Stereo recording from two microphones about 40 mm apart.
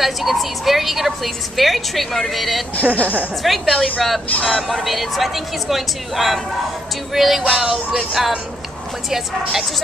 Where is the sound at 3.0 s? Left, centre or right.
Right.